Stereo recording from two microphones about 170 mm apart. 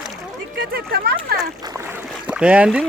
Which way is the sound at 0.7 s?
65° right (ahead or behind).